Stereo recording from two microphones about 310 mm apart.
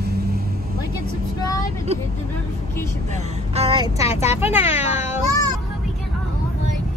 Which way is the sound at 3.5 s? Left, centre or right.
Centre.